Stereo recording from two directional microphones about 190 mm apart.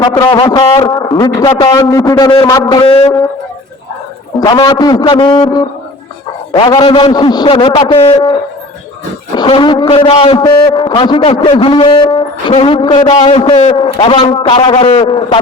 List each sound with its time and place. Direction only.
0.0 s a man's voice: 20° left (ahead or behind)
4.4 s a man's voice: 20° left (ahead or behind)
9.3 s a man's voice: 25° left (ahead or behind)